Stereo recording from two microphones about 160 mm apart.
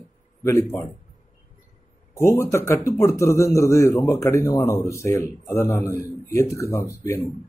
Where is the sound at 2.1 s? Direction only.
15° left (ahead or behind).